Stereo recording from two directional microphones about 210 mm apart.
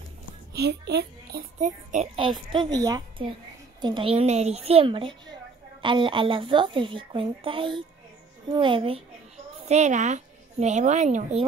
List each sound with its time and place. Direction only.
0.6 s a child's voice: 50° right (ahead or behind)
1.6 s a child's voice: 35° right (ahead or behind)